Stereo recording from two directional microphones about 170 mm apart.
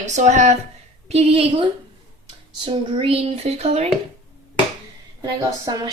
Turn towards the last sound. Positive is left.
turn(degrees=-20)  # may be behind; listen again after turning